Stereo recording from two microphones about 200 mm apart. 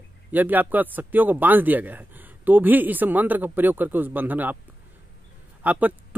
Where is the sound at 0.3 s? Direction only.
10° right (ahead or behind).